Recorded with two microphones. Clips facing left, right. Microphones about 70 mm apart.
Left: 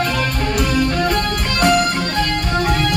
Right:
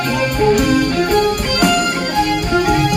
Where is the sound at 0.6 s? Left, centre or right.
Right.